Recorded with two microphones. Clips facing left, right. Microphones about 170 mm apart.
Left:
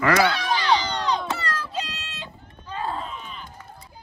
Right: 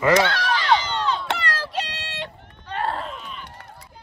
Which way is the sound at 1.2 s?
80° right.